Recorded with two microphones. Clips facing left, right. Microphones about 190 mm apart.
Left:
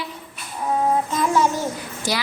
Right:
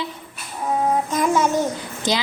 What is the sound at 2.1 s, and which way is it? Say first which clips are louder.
Speech: right 3 dB; 20° right (ahead or behind).